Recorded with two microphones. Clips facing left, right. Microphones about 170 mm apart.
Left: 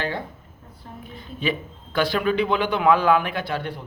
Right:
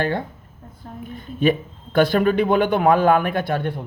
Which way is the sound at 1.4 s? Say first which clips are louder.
Right 7 dB; 50° right (ahead or behind).